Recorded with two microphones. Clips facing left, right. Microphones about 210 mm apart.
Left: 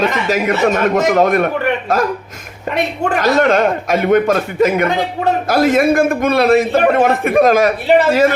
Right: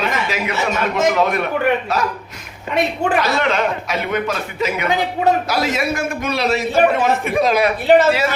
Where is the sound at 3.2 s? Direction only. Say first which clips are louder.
Left 8 dB; 45° left (ahead or behind).